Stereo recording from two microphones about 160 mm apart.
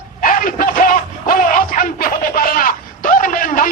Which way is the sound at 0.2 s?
60° left (ahead or behind).